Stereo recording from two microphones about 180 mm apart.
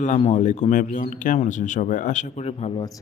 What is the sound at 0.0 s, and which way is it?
A man's voice, 40° left (ahead or behind).